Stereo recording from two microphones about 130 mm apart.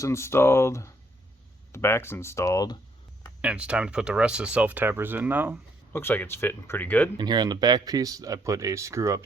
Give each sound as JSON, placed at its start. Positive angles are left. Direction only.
{"t": 0.0, "sound": "speech", "side_deg": 20}
{"t": 3.4, "sound": "speech", "side_deg": -10}
{"t": 5.9, "sound": "speech", "side_deg": 15}
{"t": 7.2, "sound": "speech", "side_deg": -30}